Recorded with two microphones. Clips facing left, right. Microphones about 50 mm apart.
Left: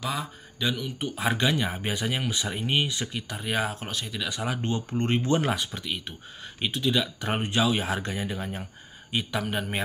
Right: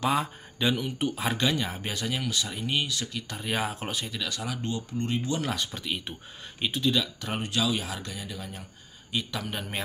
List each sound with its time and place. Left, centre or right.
0.0 s speech: right
0.6 s speech: centre
1.2 s speech: centre
3.3 s speech: centre
4.2 s speech: centre
4.5 s speech: left
5.5 s speech: centre
7.2 s speech: left
9.1 s speech: centre